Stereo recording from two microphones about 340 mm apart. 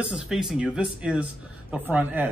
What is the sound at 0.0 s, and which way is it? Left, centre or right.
Speech, centre.